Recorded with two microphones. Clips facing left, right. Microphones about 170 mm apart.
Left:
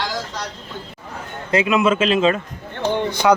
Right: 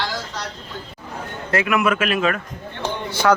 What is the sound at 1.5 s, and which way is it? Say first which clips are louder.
Speech: left 3 dB; 20° left (ahead or behind).